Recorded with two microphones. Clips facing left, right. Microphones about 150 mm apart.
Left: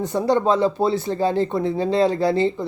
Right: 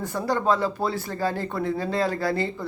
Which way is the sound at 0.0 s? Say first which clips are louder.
Left 6 dB; 20° left (ahead or behind).